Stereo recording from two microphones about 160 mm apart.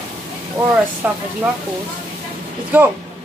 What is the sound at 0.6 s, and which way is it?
Speech, 10° right (ahead or behind).